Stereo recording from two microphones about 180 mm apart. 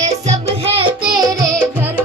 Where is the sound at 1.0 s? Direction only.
5° right (ahead or behind).